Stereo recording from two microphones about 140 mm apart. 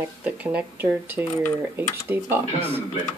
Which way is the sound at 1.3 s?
15° left (ahead or behind).